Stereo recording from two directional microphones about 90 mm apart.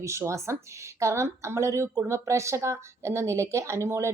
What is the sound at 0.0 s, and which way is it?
A woman's voice, 30° right (ahead or behind).